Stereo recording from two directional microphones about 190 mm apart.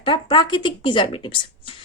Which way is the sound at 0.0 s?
25° left (ahead or behind).